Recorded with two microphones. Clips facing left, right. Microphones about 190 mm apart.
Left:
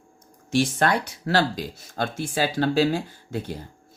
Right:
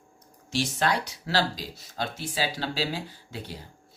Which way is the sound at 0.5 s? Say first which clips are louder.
Left 5 dB; 55° left (ahead or behind).